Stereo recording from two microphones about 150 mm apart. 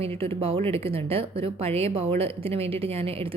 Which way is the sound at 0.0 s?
40° right (ahead or behind).